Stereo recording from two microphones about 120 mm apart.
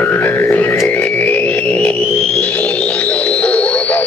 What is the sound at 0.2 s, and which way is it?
Music, 15° left (ahead or behind).